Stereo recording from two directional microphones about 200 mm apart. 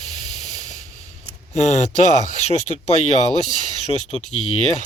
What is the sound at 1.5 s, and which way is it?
Speech, 35° left (ahead or behind).